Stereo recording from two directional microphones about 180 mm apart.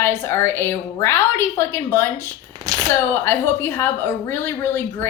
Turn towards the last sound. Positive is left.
turn(degrees=10)  # may be behind; listen again after turning